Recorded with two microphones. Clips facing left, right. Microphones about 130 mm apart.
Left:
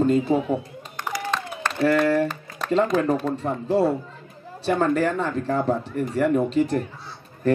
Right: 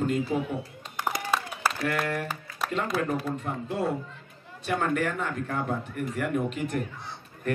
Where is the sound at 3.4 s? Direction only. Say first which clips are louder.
Left 9 dB; 35° left (ahead or behind).